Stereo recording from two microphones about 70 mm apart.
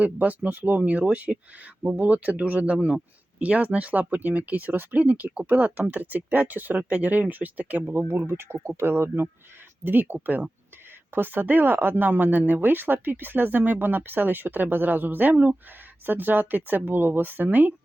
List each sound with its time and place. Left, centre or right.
0.0 s speech: right